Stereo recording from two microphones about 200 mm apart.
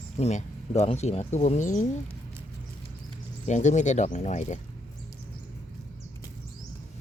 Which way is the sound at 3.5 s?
35° left (ahead or behind).